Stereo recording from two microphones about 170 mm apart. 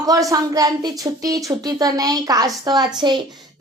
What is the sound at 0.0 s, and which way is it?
A woman's voice, 20° right (ahead or behind).